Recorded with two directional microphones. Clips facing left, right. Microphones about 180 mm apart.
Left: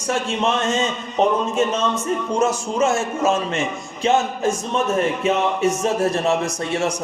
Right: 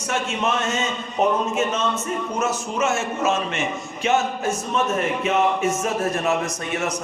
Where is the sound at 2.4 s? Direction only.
35° left (ahead or behind).